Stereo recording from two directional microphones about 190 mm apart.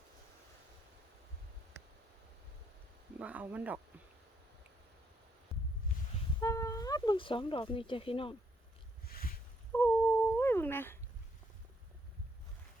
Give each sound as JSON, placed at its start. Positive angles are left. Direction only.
{"t": 3.2, "sound": "speech", "side_deg": -10}
{"t": 6.4, "sound": "speech", "side_deg": 15}
{"t": 9.7, "sound": "dog", "side_deg": 10}